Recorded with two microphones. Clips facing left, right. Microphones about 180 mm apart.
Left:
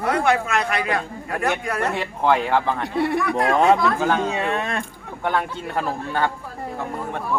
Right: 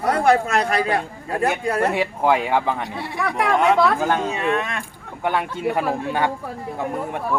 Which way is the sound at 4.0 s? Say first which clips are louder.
Even; 10° right (ahead or behind).